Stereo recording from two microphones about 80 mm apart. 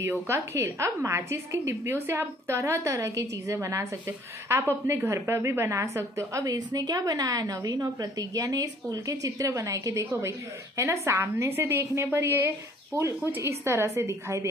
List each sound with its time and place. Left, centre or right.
0.3 s a woman's voice: right
6.5 s a woman's voice: right